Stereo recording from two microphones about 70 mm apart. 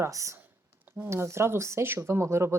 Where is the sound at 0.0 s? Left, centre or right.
Right.